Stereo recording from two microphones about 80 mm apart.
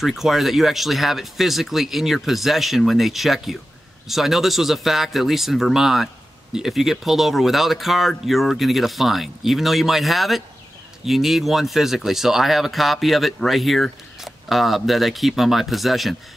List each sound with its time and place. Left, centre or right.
0.0 s speech: centre